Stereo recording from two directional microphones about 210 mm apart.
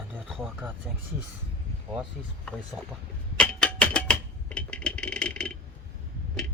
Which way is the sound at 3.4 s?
5° left (ahead or behind).